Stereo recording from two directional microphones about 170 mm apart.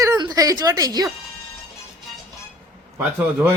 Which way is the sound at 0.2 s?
20° right (ahead or behind).